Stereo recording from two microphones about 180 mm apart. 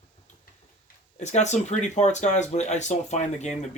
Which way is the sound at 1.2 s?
40° left (ahead or behind).